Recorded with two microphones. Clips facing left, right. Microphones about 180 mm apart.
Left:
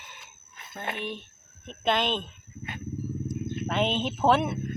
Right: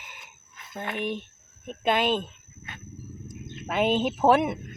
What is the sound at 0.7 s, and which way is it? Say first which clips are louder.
Speech: right 4 dB; 15° right (ahead or behind).